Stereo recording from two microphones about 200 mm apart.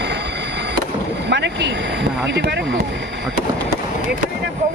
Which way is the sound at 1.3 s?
60° right (ahead or behind).